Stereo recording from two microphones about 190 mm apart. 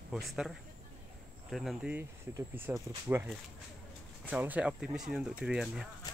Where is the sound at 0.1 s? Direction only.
Centre (ahead or behind).